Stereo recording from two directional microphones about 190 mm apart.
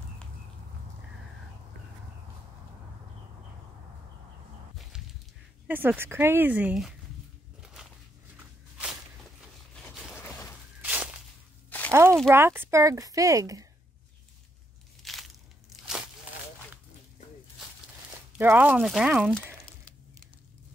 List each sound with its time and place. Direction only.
5.7 s speech: 10° right (ahead or behind)
7.6 s a sound: centre (ahead or behind)
8.4 s walk: 5° right (ahead or behind)
9.8 s a sound: 10° left (ahead or behind)
10.8 s walk: 5° right (ahead or behind)
11.9 s a sound: 15° right (ahead or behind)
12.3 s speech: 15° right (ahead or behind)
15.1 s crushing: centre (ahead or behind)
15.7 s crunch: 5° right (ahead or behind)
18.4 s speech: 10° right (ahead or behind)